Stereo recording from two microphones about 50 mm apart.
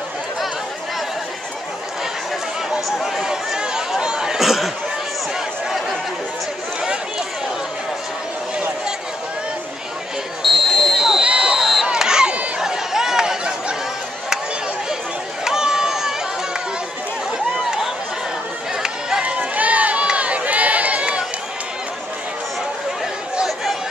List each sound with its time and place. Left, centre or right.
3.0 s chatter: centre
10.4 s a sound: centre
11.1 s a sound: centre
11.6 s crowd: centre
12.5 s chatter: centre
15.4 s a sound: centre
18.8 s run: centre
19.2 s run: right
23.4 s chatter: centre